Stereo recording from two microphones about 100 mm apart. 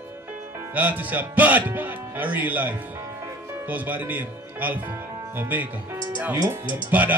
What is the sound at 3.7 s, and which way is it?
Speech, 15° right (ahead or behind).